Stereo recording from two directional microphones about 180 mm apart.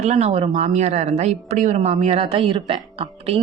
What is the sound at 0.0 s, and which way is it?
Speech, 40° right (ahead or behind).